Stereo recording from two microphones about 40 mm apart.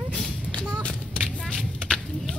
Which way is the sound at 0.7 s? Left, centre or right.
Left.